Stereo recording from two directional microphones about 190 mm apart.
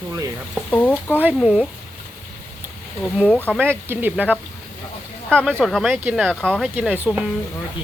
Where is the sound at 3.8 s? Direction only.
10° right (ahead or behind).